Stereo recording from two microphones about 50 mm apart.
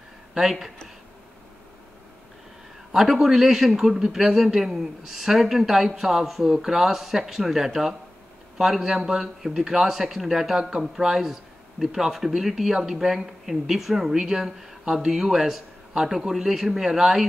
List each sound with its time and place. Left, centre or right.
0.3 s speech: centre
2.9 s a man's voice: centre